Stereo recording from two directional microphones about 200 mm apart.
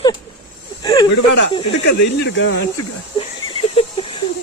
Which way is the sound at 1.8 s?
60° left (ahead or behind).